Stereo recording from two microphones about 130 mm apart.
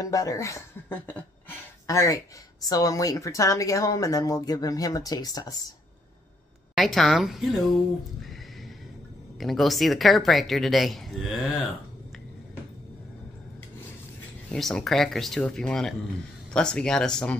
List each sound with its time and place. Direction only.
0.0 s speech: 25° left (ahead or behind)
6.7 s speech: centre (ahead or behind)
8.2 s a sound: centre (ahead or behind)
9.4 s speech: centre (ahead or behind)
14.5 s speech: 5° left (ahead or behind)